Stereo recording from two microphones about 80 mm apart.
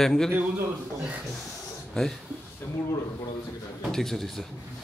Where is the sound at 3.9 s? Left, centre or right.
Centre.